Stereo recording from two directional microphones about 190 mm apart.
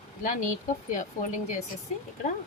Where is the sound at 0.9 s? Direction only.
40° left (ahead or behind).